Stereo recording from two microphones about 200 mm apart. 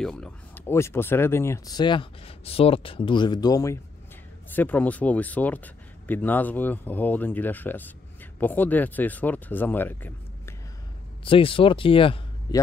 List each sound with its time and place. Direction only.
0.0 s speech: 5° left (ahead or behind)
11.2 s speech: 25° left (ahead or behind)